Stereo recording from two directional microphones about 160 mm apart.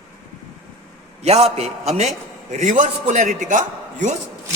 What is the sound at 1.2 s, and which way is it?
A man's voice, 40° right (ahead or behind).